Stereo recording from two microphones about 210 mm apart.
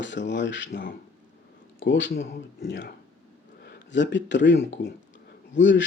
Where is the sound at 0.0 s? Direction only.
60° left (ahead or behind).